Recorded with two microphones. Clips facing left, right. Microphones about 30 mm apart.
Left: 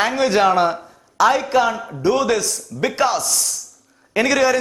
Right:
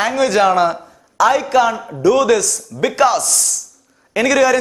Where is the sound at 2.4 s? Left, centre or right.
Left.